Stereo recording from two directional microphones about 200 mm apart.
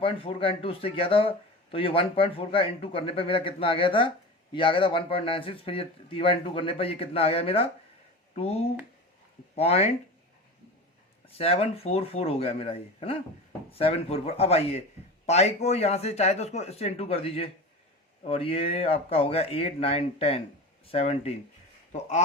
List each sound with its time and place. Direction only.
0.0 s speech: 25° left (ahead or behind)
11.3 s speech: 30° left (ahead or behind)